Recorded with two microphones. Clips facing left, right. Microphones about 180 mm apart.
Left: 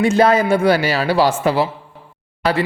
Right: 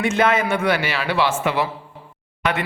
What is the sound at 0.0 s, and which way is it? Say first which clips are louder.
A man's voice: left 5 dB; 35° left (ahead or behind).